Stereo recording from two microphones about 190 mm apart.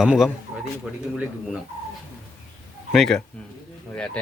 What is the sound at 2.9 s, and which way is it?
Speech, centre (ahead or behind).